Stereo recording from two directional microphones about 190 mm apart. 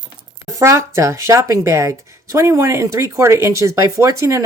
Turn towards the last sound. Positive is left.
turn(degrees=-15)  # may be behind; listen again after turning